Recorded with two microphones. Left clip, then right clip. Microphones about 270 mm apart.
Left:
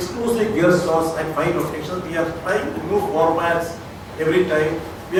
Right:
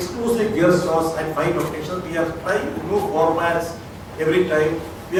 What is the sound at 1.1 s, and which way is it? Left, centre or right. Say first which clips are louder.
Speech: even; centre.